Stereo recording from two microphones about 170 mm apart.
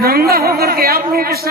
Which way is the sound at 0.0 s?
65° right (ahead or behind).